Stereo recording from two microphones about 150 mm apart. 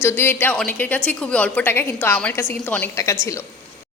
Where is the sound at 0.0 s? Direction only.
15° left (ahead or behind).